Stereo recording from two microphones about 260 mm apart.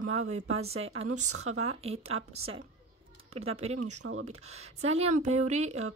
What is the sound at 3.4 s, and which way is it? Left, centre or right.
Speech, right.